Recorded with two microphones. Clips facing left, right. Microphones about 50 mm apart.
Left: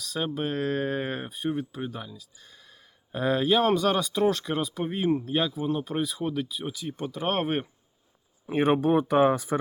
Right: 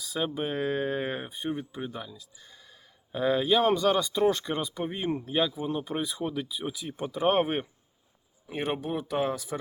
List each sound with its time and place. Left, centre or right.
0.0 s speech: centre
7.4 s speech: centre
8.4 s speech: left